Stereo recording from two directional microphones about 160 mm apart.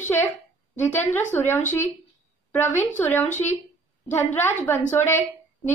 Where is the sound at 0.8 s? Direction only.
15° left (ahead or behind).